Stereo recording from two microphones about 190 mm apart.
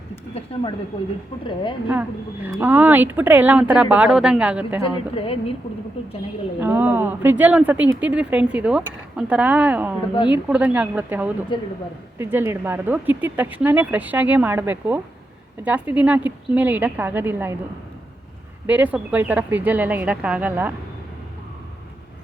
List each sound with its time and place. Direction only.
0.4 s a woman's voice: 35° left (ahead or behind)
1.9 s speech: 10° right (ahead or behind)
4.8 s a woman's voice: 30° left (ahead or behind)
6.6 s speech: 10° right (ahead or behind)
11.5 s speech: 25° left (ahead or behind)
12.1 s speech: 10° right (ahead or behind)
18.6 s speech: 10° right (ahead or behind)